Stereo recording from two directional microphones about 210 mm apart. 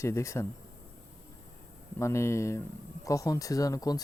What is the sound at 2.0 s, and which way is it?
Speech, 15° left (ahead or behind).